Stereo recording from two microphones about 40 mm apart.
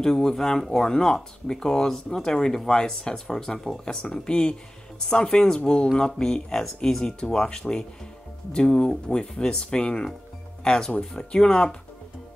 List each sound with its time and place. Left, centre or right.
0.0 s speech: centre